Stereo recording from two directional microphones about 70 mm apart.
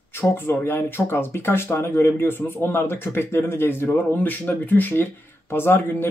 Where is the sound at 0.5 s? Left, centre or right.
Left.